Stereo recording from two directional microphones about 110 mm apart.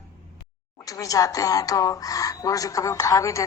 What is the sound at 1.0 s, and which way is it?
Speech, 30° left (ahead or behind).